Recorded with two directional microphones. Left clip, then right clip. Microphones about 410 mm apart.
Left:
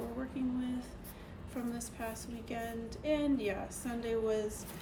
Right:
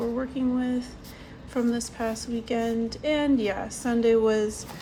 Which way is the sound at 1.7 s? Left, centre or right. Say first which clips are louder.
Right 12 dB; centre.